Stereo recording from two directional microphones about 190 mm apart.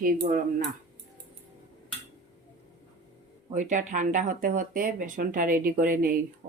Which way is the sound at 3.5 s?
40° right (ahead or behind).